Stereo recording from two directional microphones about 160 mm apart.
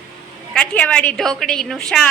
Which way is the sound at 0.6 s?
5° left (ahead or behind).